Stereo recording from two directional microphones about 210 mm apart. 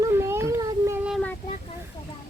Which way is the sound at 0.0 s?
10° right (ahead or behind).